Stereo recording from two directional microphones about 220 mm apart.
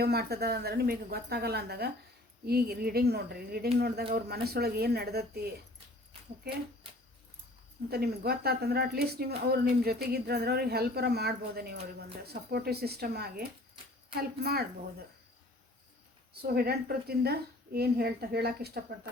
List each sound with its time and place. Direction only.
0.0 s speech: 45° right (ahead or behind)
7.9 s speech: 45° right (ahead or behind)
16.3 s speech: 45° right (ahead or behind)